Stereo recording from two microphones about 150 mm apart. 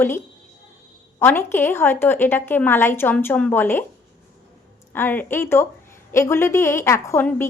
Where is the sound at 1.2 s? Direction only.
15° left (ahead or behind).